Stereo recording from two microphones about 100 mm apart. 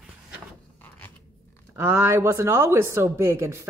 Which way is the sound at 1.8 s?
30° right (ahead or behind).